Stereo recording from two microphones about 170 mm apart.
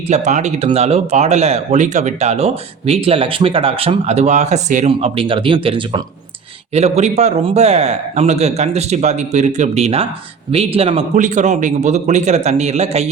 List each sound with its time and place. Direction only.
0.1 s speech: 45° right (ahead or behind)